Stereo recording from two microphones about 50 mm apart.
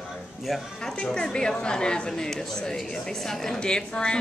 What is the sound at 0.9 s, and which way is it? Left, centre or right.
A woman's voice, centre.